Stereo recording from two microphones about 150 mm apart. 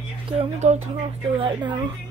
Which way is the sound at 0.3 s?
45° right (ahead or behind).